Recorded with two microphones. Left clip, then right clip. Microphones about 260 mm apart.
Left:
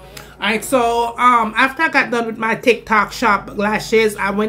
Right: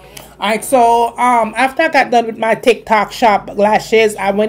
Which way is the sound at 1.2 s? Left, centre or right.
Centre.